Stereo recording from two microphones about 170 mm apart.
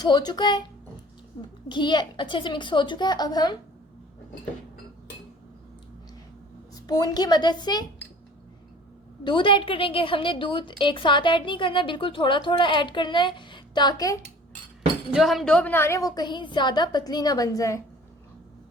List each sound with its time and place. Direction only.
0.0 s a woman's voice: 25° left (ahead or behind)
6.8 s a woman's voice: 25° left (ahead or behind)
9.2 s a woman's voice: 30° left (ahead or behind)
15.1 s a woman's voice: centre (ahead or behind); by 17.8 s 20° left (ahead or behind)